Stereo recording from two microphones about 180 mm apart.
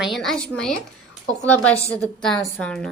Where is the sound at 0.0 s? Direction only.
Centre (ahead or behind).